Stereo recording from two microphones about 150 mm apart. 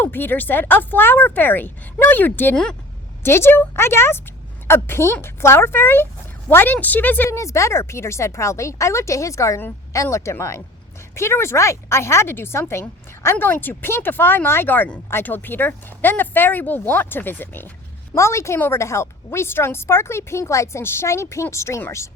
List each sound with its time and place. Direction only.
0.0 s a woman's voice: 15° left (ahead or behind)